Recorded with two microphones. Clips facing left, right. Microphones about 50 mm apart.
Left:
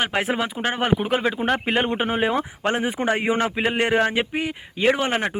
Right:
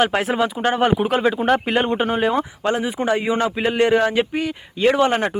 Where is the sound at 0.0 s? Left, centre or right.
Centre.